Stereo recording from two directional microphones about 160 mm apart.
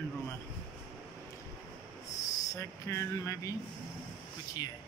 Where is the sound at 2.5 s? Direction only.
15° left (ahead or behind).